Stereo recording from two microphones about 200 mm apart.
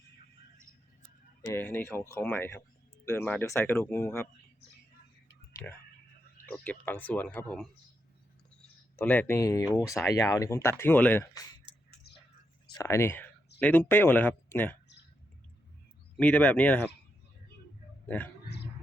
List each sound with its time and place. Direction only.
1.4 s speech: 15° left (ahead or behind)
6.4 s speech: 5° left (ahead or behind)
9.0 s speech: 10° left (ahead or behind)
12.8 s speech: 15° left (ahead or behind)
16.1 s speech: 5° left (ahead or behind)
18.4 s a sound: 55° left (ahead or behind)